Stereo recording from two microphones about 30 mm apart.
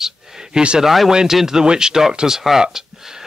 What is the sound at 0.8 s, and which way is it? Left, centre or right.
Speech, centre.